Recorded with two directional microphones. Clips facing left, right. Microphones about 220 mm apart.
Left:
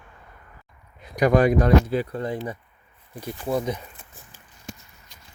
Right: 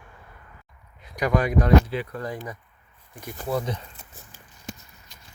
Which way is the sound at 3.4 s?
15° left (ahead or behind).